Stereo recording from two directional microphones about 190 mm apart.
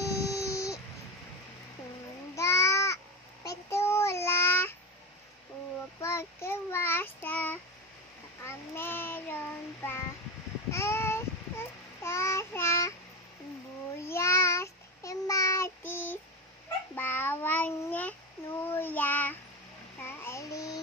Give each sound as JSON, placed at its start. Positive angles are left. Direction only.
{"t": 0.1, "sound": "wail", "side_deg": 15}
{"t": 2.3, "sound": "babbling", "side_deg": 15}
{"t": 3.4, "sound": "child singing", "side_deg": 15}
{"t": 5.9, "sound": "child singing", "side_deg": 15}
{"t": 14.0, "sound": "child singing", "side_deg": 15}